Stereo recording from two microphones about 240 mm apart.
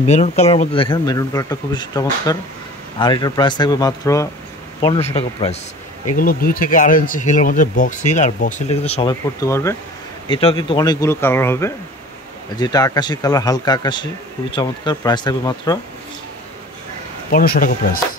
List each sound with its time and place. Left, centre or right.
0.0 s speech: left
4.8 s speech: left
6.1 s speech: left
9.4 s speech: centre
17.3 s speech: left